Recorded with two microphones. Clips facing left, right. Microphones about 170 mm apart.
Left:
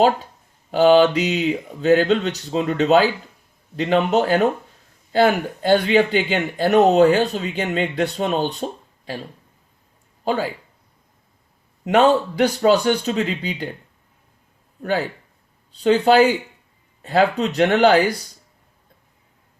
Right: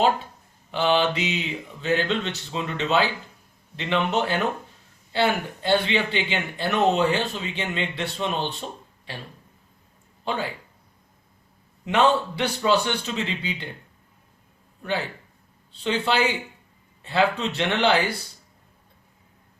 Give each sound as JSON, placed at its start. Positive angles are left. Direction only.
{"t": 0.7, "sound": "a man's voice", "side_deg": 40}
{"t": 10.2, "sound": "speech", "side_deg": 40}
{"t": 11.9, "sound": "speech", "side_deg": 40}
{"t": 14.8, "sound": "speech", "side_deg": 45}